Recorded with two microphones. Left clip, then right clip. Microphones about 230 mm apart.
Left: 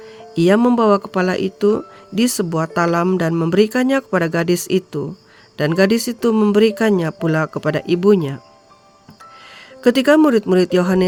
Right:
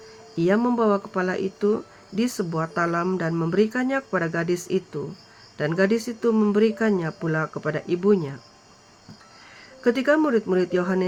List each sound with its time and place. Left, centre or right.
0.3 s speech: left
9.8 s speech: left